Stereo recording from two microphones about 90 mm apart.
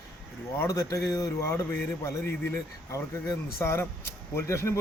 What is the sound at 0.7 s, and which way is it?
Speech, 40° left (ahead or behind).